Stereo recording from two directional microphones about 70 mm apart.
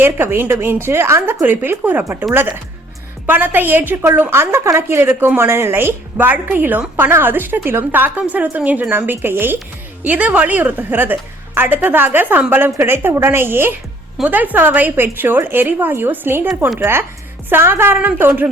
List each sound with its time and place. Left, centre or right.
0.0 s a woman's voice: right